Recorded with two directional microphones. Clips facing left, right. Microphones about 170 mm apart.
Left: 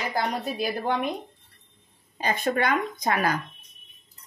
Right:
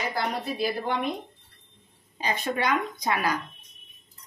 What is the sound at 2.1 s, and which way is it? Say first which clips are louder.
A woman's voice: left 3 dB; 50° left (ahead or behind).